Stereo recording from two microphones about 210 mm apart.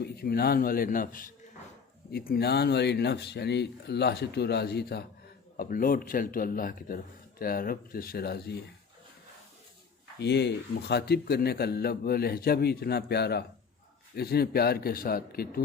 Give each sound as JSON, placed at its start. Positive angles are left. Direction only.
{"t": 0.0, "sound": "speech", "side_deg": 50}
{"t": 10.2, "sound": "speech", "side_deg": 55}